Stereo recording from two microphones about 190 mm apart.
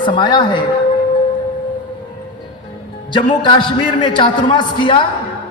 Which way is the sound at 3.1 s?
25° left (ahead or behind).